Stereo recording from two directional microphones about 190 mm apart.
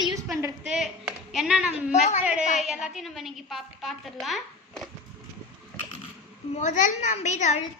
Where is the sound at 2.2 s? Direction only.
5° right (ahead or behind).